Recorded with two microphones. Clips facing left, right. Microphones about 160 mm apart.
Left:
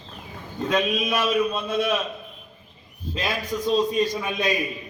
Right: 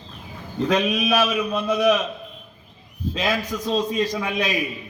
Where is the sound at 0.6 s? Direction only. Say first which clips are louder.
Right 2 dB; 90° right.